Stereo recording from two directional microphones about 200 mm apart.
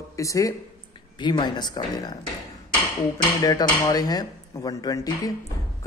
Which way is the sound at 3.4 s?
20° left (ahead or behind).